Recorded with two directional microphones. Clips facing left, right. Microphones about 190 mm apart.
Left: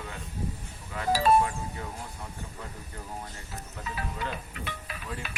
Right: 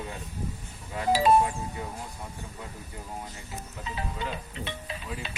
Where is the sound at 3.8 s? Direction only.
25° right (ahead or behind).